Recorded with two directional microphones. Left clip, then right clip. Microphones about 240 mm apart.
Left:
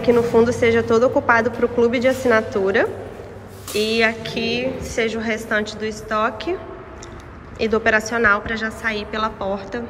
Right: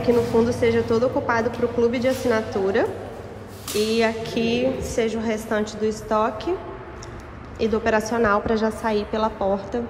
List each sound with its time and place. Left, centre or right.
0.0 s a woman's voice: centre
7.5 s a woman's voice: centre